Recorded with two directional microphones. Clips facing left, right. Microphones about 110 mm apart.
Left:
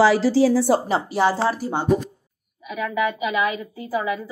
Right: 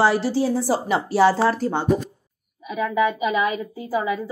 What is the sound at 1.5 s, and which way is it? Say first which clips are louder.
Speech: right 2 dB; 10° left (ahead or behind).